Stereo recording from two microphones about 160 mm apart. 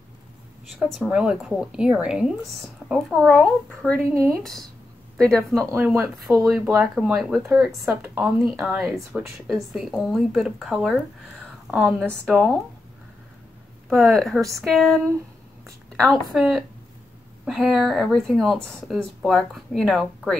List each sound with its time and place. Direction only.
0.8 s speech: centre (ahead or behind)
5.7 s speech: 15° right (ahead or behind)
6.2 s speech: centre (ahead or behind)
13.8 s speech: 5° right (ahead or behind)
16.3 s speech: centre (ahead or behind)